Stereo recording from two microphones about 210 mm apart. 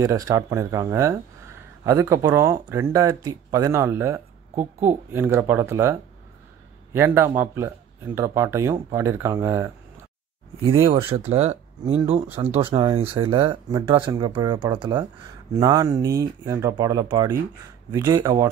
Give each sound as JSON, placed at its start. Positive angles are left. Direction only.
{"t": 0.0, "sound": "speech", "side_deg": -15}
{"t": 10.6, "sound": "speech", "side_deg": -25}